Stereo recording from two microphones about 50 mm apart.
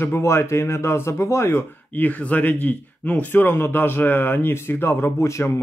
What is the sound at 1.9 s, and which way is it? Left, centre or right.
Speech, left.